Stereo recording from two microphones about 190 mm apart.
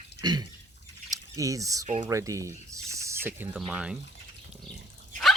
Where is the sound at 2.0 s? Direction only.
15° right (ahead or behind).